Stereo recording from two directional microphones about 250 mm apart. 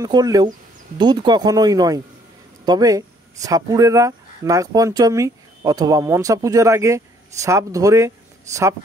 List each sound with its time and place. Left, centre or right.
0.0 s speech: centre